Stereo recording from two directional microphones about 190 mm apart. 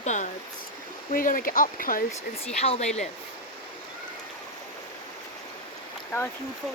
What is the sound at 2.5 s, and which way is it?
Speech, 35° left (ahead or behind).